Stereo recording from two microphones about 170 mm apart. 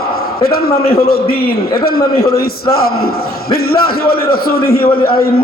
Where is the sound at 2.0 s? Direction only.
20° left (ahead or behind).